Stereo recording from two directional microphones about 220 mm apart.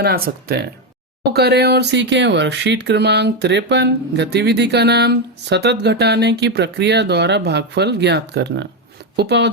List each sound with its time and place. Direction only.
0.0 s speech: 45° right (ahead or behind)